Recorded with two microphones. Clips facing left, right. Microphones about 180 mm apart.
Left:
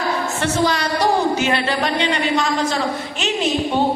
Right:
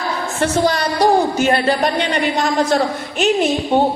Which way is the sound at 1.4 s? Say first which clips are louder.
Right 4 dB; 45° right (ahead or behind).